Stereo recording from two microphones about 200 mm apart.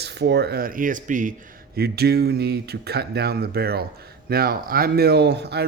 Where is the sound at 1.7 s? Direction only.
50° right (ahead or behind).